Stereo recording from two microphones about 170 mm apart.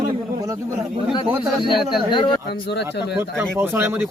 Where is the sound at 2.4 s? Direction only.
80° left.